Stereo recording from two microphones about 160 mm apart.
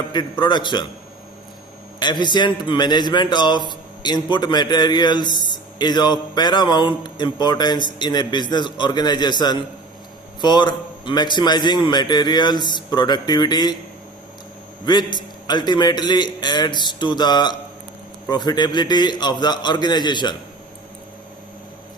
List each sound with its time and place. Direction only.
0.1 s a man's voice: 30° left (ahead or behind)
2.0 s a man's voice: 30° left (ahead or behind)
14.8 s a man's voice: 25° left (ahead or behind)